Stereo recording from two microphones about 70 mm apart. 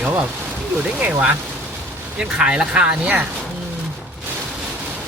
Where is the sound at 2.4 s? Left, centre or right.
Centre.